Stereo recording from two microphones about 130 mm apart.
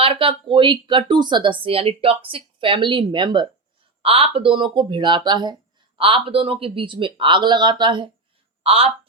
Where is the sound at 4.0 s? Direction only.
45° right (ahead or behind).